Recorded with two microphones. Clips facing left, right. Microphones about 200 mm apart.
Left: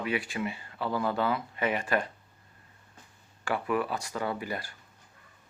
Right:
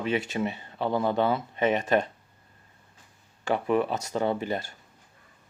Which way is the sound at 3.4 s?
25° right (ahead or behind).